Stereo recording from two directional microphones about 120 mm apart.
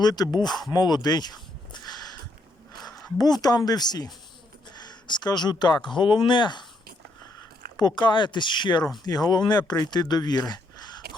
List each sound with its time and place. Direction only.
0.0 s speech: 35° left (ahead or behind)
3.2 s speech: 35° left (ahead or behind)
7.8 s speech: 40° left (ahead or behind)